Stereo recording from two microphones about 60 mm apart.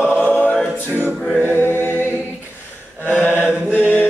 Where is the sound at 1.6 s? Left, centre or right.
Left.